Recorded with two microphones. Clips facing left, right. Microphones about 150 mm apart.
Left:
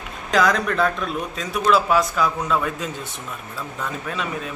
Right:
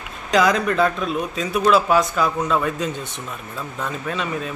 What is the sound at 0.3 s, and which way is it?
Speech, centre (ahead or behind).